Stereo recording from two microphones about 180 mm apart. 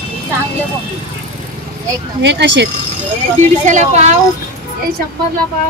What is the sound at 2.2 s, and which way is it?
Speech, 75° right (ahead or behind).